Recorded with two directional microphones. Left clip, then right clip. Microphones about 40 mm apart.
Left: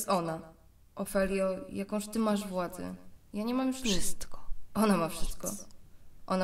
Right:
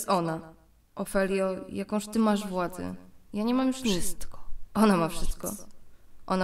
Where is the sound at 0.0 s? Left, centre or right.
Right.